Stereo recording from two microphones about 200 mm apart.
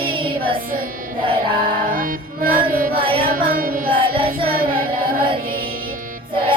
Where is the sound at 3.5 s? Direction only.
45° right (ahead or behind).